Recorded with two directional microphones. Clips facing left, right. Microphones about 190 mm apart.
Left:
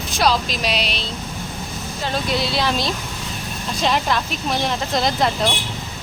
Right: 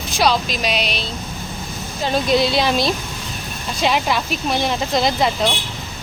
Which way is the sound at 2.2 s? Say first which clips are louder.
Right 5 dB; 15° right (ahead or behind).